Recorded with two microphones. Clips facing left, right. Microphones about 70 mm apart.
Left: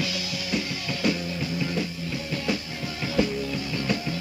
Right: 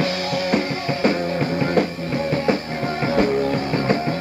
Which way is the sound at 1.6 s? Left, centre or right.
Right.